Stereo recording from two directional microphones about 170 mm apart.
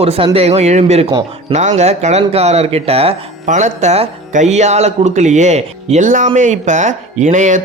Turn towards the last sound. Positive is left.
turn(degrees=-45)  # may be behind; listen again after turning